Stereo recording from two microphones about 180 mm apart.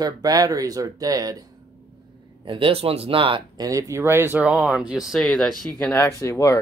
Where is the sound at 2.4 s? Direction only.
30° right (ahead or behind); by 5.4 s centre (ahead or behind).